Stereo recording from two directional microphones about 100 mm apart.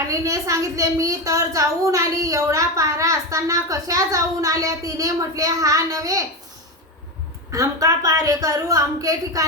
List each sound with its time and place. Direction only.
0.1 s a woman's voice: 35° right (ahead or behind)
7.5 s a woman's voice: 35° right (ahead or behind)